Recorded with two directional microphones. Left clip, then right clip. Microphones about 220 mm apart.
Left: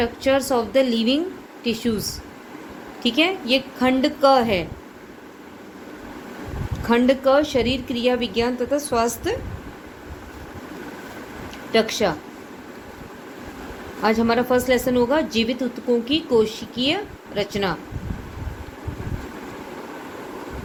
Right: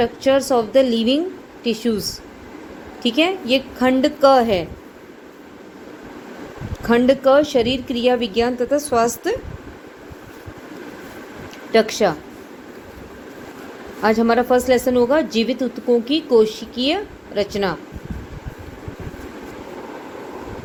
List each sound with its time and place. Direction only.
0.0 s speech: 10° right (ahead or behind)
6.8 s speech: 15° right (ahead or behind)
11.7 s speech: 15° right (ahead or behind)
14.0 s speech: 15° right (ahead or behind)